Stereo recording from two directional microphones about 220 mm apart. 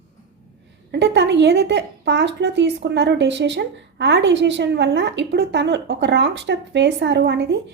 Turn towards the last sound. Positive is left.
turn(degrees=-50)  # may be behind; listen again after turning